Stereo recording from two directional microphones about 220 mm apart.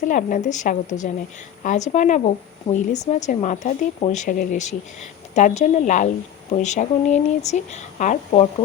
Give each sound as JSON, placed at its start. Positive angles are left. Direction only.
{"t": 0.0, "sound": "speech", "side_deg": 35}